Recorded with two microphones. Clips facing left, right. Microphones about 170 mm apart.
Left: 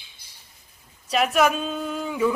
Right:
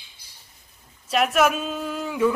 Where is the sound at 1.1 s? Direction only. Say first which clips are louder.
Even; centre (ahead or behind).